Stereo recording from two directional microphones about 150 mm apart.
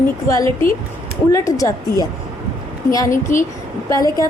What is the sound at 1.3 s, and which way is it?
Speech, 20° left (ahead or behind).